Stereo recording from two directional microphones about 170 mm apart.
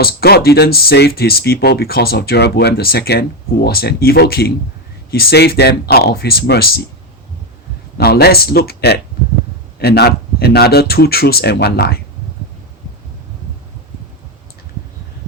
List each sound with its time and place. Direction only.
0.0 s a man's voice: 65° left (ahead or behind)
7.9 s a man's voice: 65° left (ahead or behind)